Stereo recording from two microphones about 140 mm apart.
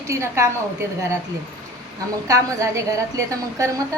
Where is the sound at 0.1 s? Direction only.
20° right (ahead or behind).